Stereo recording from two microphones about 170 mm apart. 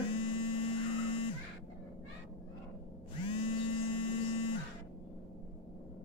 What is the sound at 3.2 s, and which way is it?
Drill, 30° left (ahead or behind).